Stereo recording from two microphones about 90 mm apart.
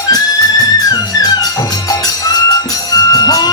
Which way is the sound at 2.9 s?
45° left (ahead or behind).